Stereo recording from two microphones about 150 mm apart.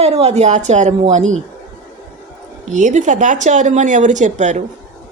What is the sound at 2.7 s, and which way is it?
A woman's voice, 55° right (ahead or behind).